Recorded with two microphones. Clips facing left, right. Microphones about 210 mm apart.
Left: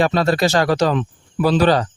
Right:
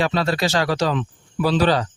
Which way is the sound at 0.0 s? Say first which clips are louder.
Left 4 dB; 45° left (ahead or behind).